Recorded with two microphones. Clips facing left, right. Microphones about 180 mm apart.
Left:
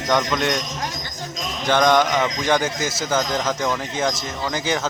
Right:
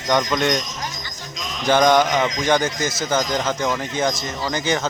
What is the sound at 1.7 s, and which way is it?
A man's voice, 5° right (ahead or behind).